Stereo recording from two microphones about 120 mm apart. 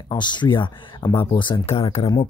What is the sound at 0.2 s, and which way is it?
Speech, 40° left (ahead or behind).